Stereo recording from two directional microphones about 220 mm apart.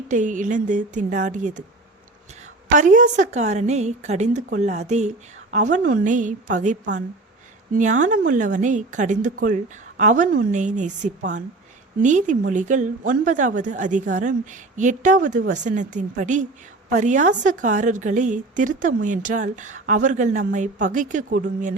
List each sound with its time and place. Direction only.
0.1 s a woman's voice: 35° right (ahead or behind)
2.7 s a woman's voice: 35° right (ahead or behind)